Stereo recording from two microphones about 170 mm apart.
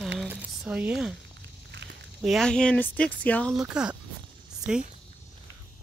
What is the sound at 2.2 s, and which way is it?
Speech, centre (ahead or behind).